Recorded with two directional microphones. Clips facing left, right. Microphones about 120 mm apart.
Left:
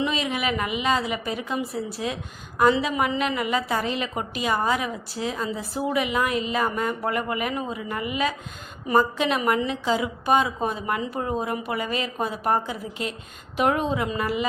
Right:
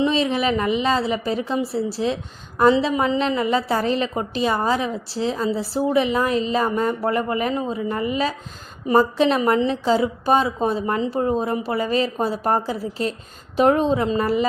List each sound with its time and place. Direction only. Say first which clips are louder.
0.0 s a woman's voice: right 6 dB; 30° right (ahead or behind)